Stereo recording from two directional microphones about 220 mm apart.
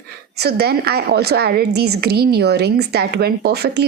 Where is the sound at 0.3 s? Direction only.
45° right (ahead or behind).